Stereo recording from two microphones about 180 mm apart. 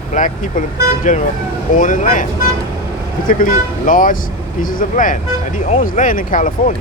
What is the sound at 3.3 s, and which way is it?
Speech, 50° left (ahead or behind).